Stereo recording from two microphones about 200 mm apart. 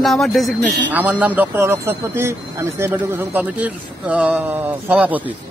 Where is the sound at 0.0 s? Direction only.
Centre (ahead or behind).